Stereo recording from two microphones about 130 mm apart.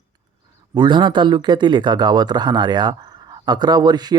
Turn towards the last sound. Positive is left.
turn(degrees=-30)  # may be behind; listen again after turning